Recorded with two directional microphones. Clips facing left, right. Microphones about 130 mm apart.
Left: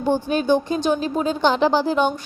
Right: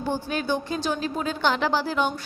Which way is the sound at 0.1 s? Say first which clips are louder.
Left 8 dB; 20° left (ahead or behind).